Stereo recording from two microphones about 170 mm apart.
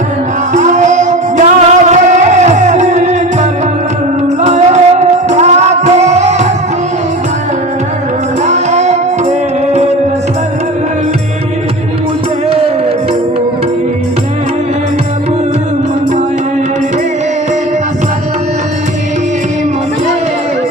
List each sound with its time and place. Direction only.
0.5 s music: 45° right (ahead or behind)
4.4 s music: 40° right (ahead or behind)
8.4 s music: 40° right (ahead or behind)
12.5 s music: 35° right (ahead or behind)